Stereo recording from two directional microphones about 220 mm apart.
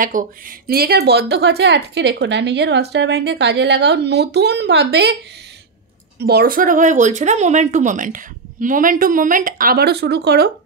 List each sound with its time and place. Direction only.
0.0 s a woman's voice: 40° right (ahead or behind)
6.1 s speech: 45° right (ahead or behind)